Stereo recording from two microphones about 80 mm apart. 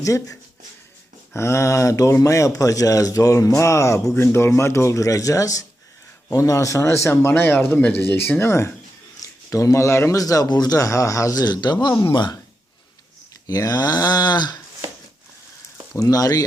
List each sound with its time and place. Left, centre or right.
0.0 s speech: left
10.2 s speech: left
13.5 s a sound: left
16.0 s speech: left